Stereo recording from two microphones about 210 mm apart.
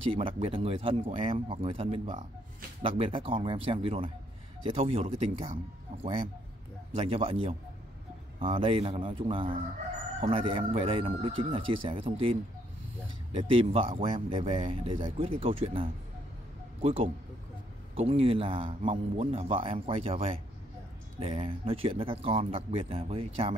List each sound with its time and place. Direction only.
0.0 s speech: 25° right (ahead or behind)
7.0 s speech: 25° right (ahead or behind)
13.4 s speech: 25° right (ahead or behind)